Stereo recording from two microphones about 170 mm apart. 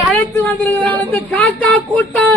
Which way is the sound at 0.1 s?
10° left (ahead or behind).